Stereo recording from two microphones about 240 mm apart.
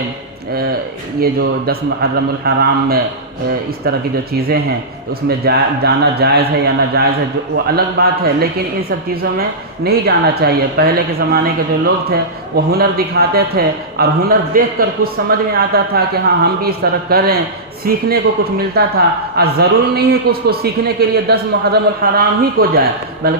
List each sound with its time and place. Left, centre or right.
1.2 s a man's voice: right
5.5 s a man's voice: right
9.8 s a man's voice: right